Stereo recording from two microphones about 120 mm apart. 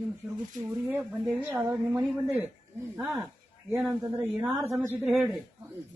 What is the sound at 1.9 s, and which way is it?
Speech, 20° right (ahead or behind).